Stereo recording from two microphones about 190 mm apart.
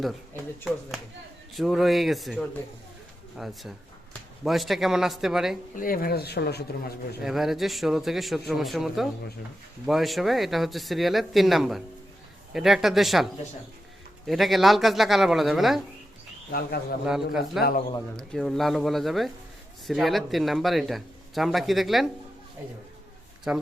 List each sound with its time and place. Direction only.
0.7 s speech: centre (ahead or behind)
5.7 s speech: 50° left (ahead or behind)
7.2 s speech: centre (ahead or behind)
14.3 s speech: centre (ahead or behind)
16.5 s speech: 55° left (ahead or behind)
18.2 s speech: 5° left (ahead or behind)
23.5 s speech: 5° right (ahead or behind)